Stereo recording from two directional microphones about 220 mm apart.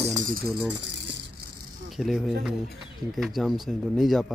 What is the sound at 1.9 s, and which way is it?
Speech, centre (ahead or behind).